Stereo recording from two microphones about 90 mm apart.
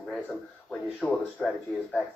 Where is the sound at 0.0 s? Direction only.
Centre (ahead or behind).